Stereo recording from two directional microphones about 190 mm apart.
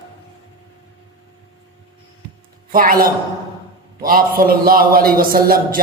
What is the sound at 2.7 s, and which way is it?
A woman's voice, 50° right (ahead or behind).